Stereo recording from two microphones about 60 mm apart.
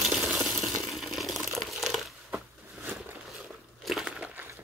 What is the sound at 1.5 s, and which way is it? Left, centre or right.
Crumpling, centre.